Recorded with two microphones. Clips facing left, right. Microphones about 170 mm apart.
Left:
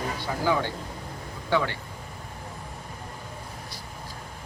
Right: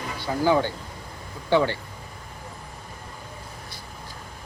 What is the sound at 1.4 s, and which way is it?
Speech, 30° right (ahead or behind).